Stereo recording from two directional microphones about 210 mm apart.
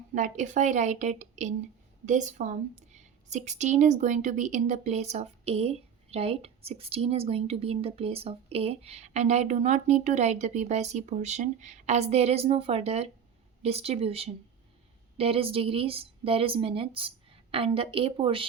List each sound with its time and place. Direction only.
0.1 s a woman's voice: 35° right (ahead or behind)